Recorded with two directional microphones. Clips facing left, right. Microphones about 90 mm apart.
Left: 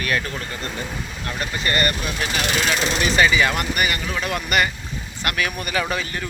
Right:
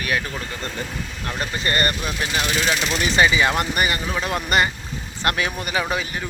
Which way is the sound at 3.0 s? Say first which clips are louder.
Even; 20° right (ahead or behind).